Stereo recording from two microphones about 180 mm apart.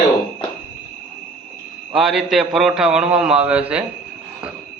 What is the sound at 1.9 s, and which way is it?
A man's voice, centre (ahead or behind).